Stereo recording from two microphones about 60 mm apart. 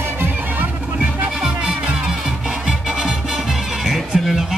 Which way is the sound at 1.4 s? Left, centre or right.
Centre.